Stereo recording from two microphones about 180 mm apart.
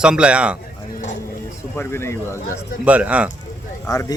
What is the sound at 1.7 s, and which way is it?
Speech, 15° left (ahead or behind).